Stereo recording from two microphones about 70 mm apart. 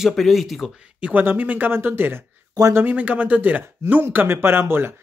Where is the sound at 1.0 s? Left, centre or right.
Right.